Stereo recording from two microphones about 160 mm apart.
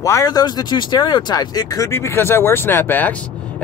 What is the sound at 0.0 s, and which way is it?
Speech, 20° left (ahead or behind).